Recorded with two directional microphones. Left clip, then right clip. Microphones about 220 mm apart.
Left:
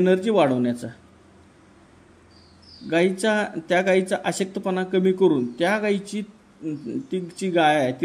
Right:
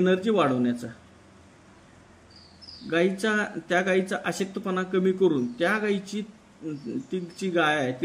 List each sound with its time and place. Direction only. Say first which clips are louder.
0.0 s speech: left 4 dB; 20° left (ahead or behind)
2.9 s speech: left 4 dB; 20° left (ahead or behind)